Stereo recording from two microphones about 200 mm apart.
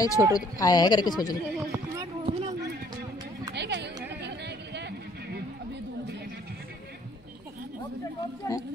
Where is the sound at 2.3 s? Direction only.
30° right (ahead or behind).